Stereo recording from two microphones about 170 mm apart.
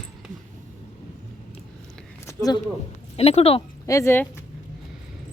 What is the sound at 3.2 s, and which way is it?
Speech, 35° left (ahead or behind).